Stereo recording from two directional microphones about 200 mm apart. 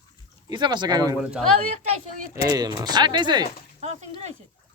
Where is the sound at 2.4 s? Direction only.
20° right (ahead or behind).